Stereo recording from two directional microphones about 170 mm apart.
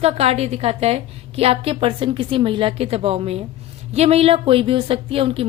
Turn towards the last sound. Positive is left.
turn(degrees=-35)  # may be behind; listen again after turning